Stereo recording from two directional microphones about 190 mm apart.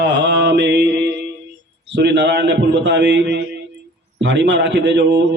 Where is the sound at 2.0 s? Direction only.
65° right (ahead or behind).